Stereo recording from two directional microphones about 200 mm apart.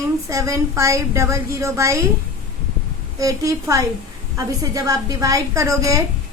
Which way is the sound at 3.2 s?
15° right (ahead or behind).